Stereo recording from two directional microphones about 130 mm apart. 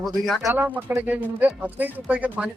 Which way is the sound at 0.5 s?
15° right (ahead or behind).